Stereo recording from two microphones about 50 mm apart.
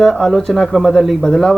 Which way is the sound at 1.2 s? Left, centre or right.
Centre.